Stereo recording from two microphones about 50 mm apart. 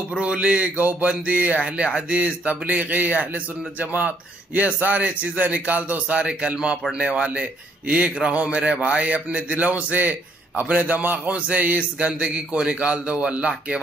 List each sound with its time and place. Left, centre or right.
0.1 s speech: right
4.6 s a man's voice: right